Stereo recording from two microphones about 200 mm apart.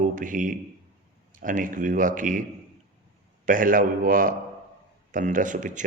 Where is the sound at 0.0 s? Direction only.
40° right (ahead or behind).